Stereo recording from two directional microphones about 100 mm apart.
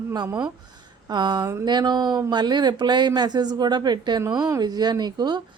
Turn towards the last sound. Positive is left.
turn(degrees=-45)  # may be behind; listen again after turning